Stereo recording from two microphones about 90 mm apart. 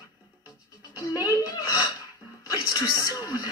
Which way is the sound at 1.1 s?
45° left (ahead or behind).